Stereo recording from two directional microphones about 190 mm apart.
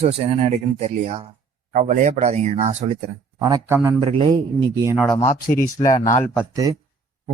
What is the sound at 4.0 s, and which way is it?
Speech, 30° right (ahead or behind).